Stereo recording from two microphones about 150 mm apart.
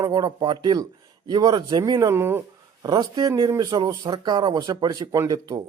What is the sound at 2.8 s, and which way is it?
Speech, 25° right (ahead or behind).